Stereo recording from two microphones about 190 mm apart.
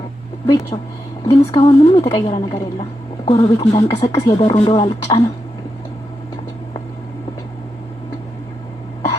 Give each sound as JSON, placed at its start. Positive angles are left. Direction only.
{"t": 0.7, "sound": "speech", "side_deg": 20}